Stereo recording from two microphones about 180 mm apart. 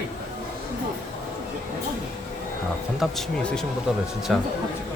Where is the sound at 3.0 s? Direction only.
Centre (ahead or behind).